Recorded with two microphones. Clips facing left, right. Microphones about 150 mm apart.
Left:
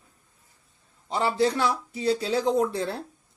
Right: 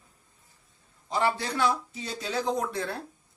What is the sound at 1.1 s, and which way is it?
Speech, 30° left (ahead or behind).